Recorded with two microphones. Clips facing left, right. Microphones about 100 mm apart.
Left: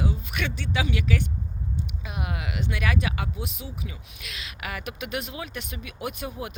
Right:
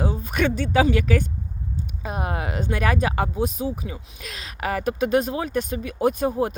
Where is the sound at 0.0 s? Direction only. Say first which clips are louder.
Right 7 dB; 40° right (ahead or behind).